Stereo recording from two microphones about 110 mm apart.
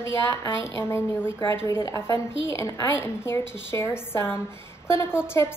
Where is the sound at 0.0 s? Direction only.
25° left (ahead or behind).